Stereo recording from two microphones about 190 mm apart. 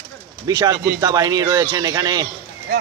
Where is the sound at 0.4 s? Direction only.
20° right (ahead or behind).